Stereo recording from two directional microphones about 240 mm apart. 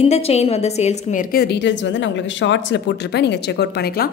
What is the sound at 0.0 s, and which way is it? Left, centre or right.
A woman's voice, left.